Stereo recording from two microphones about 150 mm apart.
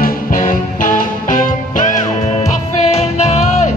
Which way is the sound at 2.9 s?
45° left (ahead or behind).